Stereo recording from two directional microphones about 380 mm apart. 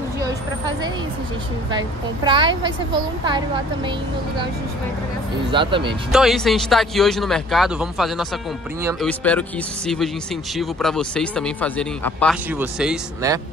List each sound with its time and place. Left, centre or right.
1.7 s a woman's voice: centre
5.5 s a woman's voice: centre
6.1 s speech: centre